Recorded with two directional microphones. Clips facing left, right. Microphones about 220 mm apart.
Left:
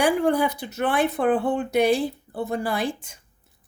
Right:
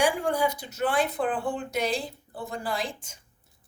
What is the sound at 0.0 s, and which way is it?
Speech, 60° left (ahead or behind).